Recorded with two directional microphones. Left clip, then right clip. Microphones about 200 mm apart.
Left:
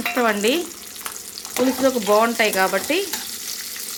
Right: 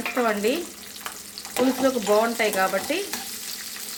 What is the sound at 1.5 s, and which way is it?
Frying, 10° left (ahead or behind).